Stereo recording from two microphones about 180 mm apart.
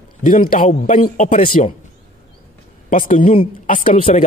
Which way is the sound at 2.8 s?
50° left (ahead or behind).